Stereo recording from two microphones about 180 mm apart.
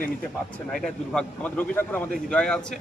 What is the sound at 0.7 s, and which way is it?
Speech, 5° left (ahead or behind).